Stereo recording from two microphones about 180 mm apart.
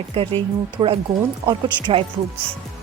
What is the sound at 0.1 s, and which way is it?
Speech, 30° right (ahead or behind).